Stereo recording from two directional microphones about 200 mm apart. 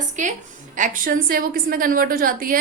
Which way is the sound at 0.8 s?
45° right (ahead or behind).